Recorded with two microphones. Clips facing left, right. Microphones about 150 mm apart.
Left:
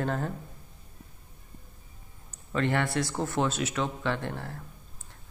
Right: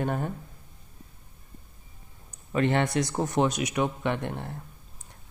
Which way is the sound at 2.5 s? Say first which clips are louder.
Right 3 dB; 20° right (ahead or behind).